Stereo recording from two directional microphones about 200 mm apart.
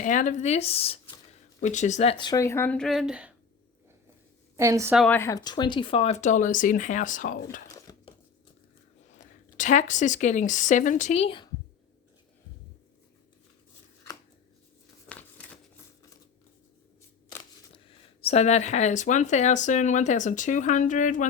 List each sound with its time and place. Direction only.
0.0 s speech: 40° left (ahead or behind); by 3.3 s 5° right (ahead or behind)
4.5 s a woman's voice: 15° right (ahead or behind)
4.9 s speech: 10° left (ahead or behind); by 7.3 s 40° left (ahead or behind)
7.7 s a sound: 20° left (ahead or behind)
9.1 s speech: 40° left (ahead or behind)
15.1 s a sound: 5° left (ahead or behind)
17.8 s speech: 30° left (ahead or behind)